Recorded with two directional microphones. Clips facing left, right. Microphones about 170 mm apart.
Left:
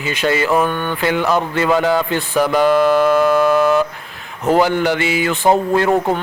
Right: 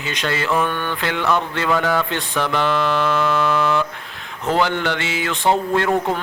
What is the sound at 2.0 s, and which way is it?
Mantra, 10° left (ahead or behind).